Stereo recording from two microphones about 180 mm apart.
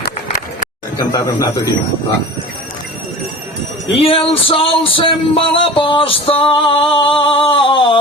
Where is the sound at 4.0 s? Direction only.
30° left (ahead or behind).